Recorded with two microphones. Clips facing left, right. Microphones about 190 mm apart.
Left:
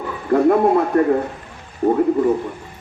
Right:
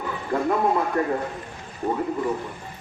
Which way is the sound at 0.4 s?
55° left (ahead or behind).